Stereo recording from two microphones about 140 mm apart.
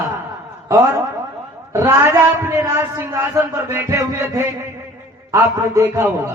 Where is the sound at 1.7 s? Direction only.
20° right (ahead or behind).